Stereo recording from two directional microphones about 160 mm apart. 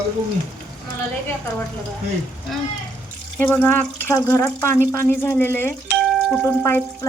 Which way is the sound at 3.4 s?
10° left (ahead or behind).